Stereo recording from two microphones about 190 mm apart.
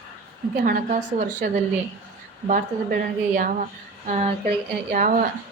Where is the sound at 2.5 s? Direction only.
45° right (ahead or behind).